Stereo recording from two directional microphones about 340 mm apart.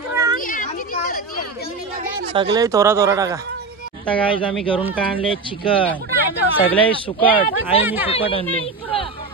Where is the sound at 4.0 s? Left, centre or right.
Centre.